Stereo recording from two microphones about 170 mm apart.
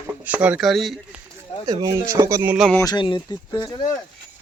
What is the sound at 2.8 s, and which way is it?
Speech, 25° left (ahead or behind).